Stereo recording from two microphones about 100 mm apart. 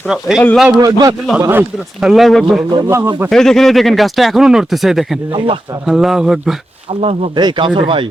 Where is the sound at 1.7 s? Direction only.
5° right (ahead or behind).